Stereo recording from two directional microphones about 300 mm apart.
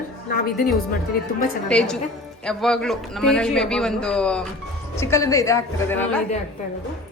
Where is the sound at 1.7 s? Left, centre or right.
Centre.